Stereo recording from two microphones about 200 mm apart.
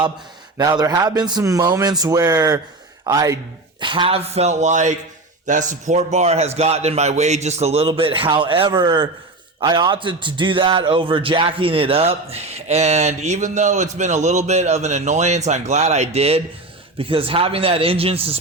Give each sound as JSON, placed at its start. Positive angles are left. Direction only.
{"t": 0.5, "sound": "a man's voice", "side_deg": -20}